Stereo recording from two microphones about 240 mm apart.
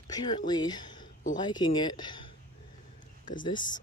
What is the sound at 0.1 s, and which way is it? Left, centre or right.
Speech, centre.